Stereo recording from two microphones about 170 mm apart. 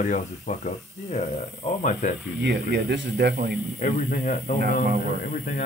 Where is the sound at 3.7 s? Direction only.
50° left (ahead or behind).